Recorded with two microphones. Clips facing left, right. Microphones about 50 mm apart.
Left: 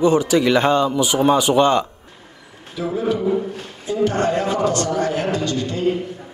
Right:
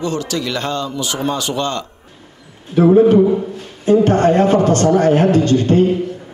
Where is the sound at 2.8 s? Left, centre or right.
Right.